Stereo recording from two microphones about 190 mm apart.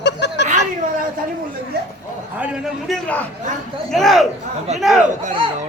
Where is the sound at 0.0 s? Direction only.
65° left (ahead or behind).